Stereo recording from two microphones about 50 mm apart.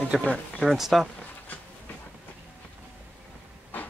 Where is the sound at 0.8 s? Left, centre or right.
Centre.